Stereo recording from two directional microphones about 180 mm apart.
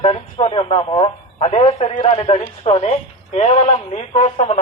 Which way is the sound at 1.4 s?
35° left (ahead or behind).